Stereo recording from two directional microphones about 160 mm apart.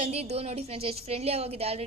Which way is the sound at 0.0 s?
40° right (ahead or behind).